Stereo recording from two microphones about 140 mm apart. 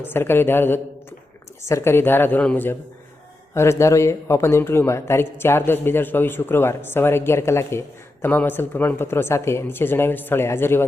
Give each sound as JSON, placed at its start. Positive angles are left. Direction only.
{"t": 0.0, "sound": "speech", "side_deg": 15}